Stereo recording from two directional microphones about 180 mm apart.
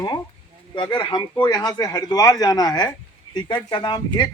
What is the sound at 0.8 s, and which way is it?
Speech, 25° left (ahead or behind).